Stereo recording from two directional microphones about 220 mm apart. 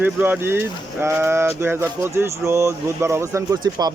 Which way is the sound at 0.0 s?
10° right (ahead or behind).